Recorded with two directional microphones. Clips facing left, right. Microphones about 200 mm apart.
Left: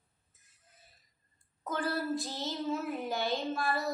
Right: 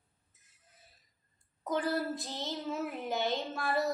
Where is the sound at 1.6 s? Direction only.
20° right (ahead or behind).